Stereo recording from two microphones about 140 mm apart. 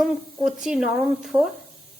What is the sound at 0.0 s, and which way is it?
Speech, centre (ahead or behind).